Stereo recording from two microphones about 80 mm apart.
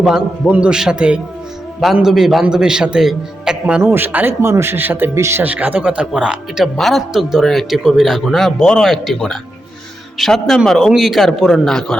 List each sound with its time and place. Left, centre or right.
0.0 s a man's voice: centre
3.9 s speech: right
5.4 s a man's voice: centre
6.7 s a man's voice: centre